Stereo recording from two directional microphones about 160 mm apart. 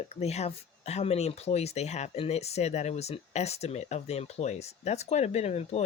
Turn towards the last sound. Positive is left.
turn(degrees=40)  # may be behind; listen again after turning